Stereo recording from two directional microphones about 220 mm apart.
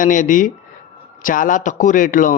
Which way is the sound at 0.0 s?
35° left (ahead or behind).